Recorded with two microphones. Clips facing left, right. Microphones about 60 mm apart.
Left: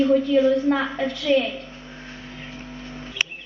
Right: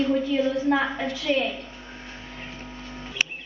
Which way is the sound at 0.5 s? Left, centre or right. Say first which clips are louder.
Left 2 dB; centre.